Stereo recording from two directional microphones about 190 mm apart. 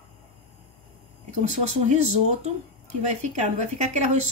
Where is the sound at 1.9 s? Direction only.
35° right (ahead or behind).